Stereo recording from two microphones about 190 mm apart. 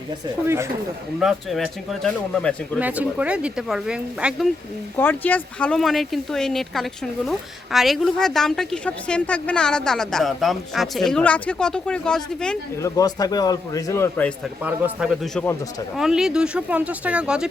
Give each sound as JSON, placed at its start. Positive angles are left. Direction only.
{"t": 0.4, "sound": "speech", "side_deg": -15}
{"t": 1.2, "sound": "speech", "side_deg": 0}
{"t": 2.8, "sound": "speech", "side_deg": -10}
{"t": 4.9, "sound": "speech", "side_deg": 10}
{"t": 12.8, "sound": "a man's voice", "side_deg": 20}
{"t": 14.6, "sound": "speech", "side_deg": -10}